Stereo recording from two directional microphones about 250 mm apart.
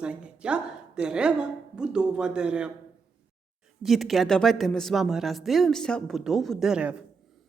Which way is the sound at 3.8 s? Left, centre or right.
Centre.